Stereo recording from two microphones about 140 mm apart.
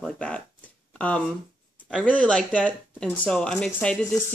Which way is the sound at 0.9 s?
10° left (ahead or behind).